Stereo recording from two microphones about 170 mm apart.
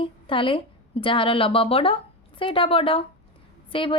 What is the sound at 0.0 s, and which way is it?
A woman's voice, 30° left (ahead or behind).